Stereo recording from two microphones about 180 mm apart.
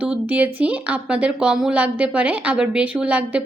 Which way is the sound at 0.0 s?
5° right (ahead or behind).